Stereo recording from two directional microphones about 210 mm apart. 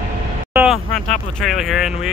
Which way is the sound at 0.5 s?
Centre (ahead or behind).